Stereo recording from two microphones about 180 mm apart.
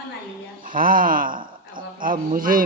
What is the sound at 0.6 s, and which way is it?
Speech, 50° right (ahead or behind).